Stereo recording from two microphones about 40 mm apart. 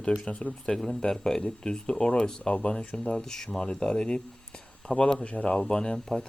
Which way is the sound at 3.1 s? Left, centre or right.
Centre.